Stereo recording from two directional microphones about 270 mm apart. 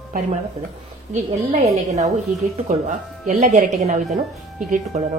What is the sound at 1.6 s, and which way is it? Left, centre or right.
A woman's voice, right.